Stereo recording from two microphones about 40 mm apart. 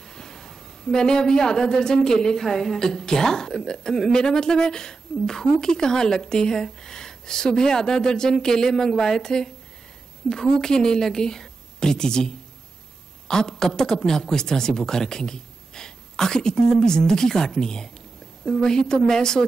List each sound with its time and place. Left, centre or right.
0.0 s a woman's voice: centre
13.3 s a woman's voice: centre